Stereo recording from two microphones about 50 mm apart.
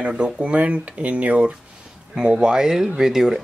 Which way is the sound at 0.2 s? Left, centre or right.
Right.